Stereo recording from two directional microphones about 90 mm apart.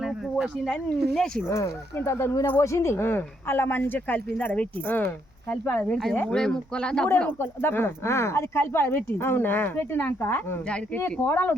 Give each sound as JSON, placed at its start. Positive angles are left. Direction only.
{"t": 0.0, "sound": "a sound", "side_deg": -5}
{"t": 0.7, "sound": "speech", "side_deg": 5}
{"t": 1.5, "sound": "speech", "side_deg": 30}
{"t": 6.2, "sound": "speech", "side_deg": 10}
{"t": 7.3, "sound": "speech", "side_deg": 25}